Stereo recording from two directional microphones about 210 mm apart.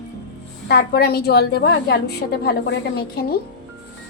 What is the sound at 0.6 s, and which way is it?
A woman's voice, 50° left (ahead or behind).